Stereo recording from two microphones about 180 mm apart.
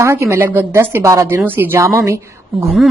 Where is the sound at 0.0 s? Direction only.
15° right (ahead or behind).